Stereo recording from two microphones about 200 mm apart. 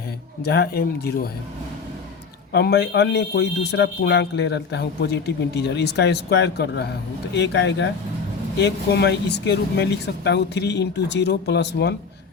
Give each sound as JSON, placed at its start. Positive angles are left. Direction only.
{"t": 0.4, "sound": "speech", "side_deg": 55}
{"t": 2.5, "sound": "a man's voice", "side_deg": 55}